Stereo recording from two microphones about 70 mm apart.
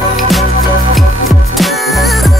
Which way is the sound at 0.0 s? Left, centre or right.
Centre.